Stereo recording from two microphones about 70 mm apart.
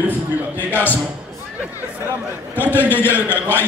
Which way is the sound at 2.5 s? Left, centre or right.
Left.